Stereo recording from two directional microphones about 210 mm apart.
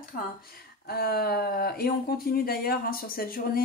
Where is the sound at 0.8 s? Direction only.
50° left (ahead or behind).